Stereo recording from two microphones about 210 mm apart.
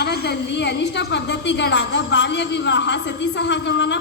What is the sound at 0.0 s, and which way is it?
A man's voice, 50° left (ahead or behind).